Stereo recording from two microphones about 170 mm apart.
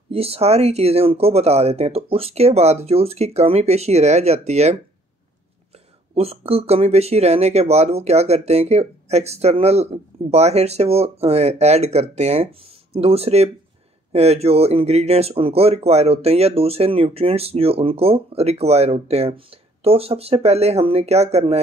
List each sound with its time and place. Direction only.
0.1 s speech: 35° right (ahead or behind)
6.1 s speech: 35° right (ahead or behind)